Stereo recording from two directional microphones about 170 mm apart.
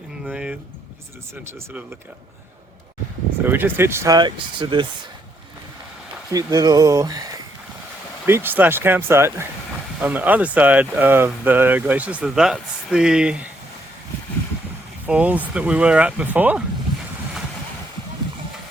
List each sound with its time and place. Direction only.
0.3 s speech: 5° right (ahead or behind)
3.4 s speech: 10° right (ahead or behind); by 4.9 s 30° right (ahead or behind)
6.3 s speech: 20° right (ahead or behind); by 13.5 s 5° right (ahead or behind)
15.0 s speech: 10° right (ahead or behind)